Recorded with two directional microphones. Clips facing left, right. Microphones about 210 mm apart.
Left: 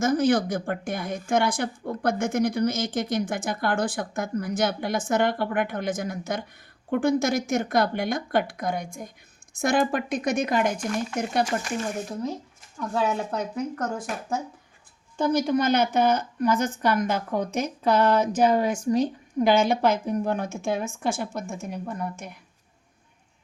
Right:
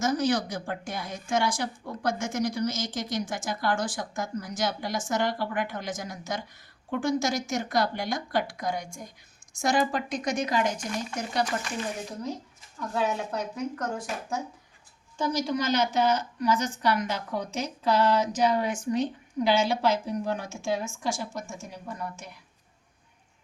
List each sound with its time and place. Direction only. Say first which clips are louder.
0.0 s a woman's voice: left 4 dB; 55° left (ahead or behind)
15.2 s a woman's voice: left 5 dB; 55° left (ahead or behind)